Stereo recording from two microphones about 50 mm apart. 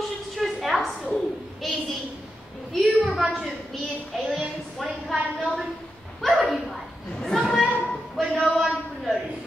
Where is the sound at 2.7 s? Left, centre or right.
Centre.